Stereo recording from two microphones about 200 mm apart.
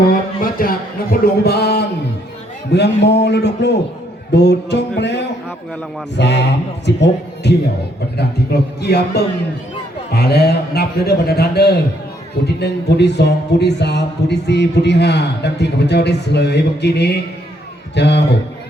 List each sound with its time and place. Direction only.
0.6 s a man's voice: 45° left (ahead or behind)